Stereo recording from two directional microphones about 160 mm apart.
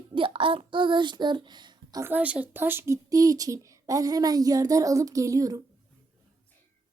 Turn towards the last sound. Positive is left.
turn(degrees=-20)  # may be behind; listen again after turning